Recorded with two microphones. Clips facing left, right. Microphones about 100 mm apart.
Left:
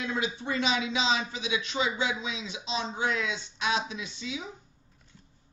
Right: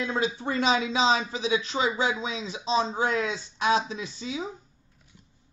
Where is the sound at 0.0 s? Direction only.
35° right (ahead or behind).